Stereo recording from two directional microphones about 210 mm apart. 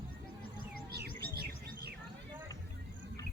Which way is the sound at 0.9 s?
50° right (ahead or behind).